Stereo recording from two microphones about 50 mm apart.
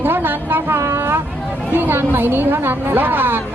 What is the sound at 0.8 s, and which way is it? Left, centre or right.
Speech, right.